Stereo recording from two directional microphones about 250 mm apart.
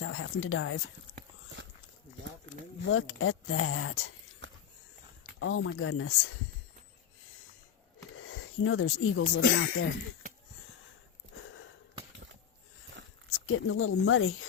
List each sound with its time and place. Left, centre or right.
0.0 s speech: left
2.8 s speech: left
4.4 s a sound: right
5.4 s speech: left
8.1 s speech: left
13.5 s speech: left